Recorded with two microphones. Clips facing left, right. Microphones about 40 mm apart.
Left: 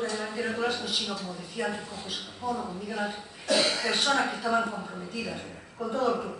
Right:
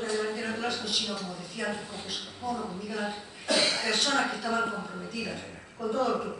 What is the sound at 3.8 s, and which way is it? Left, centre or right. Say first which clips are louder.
A man's voice: left 1 dB; centre.